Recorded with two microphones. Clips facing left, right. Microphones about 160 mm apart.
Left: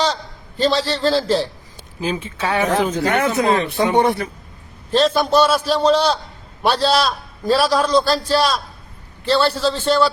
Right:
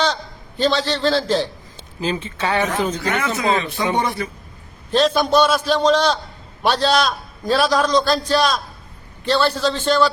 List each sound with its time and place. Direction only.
0.6 s a man's voice: 5° left (ahead or behind)
3.0 s speech: 55° left (ahead or behind)
4.9 s a man's voice: 5° left (ahead or behind)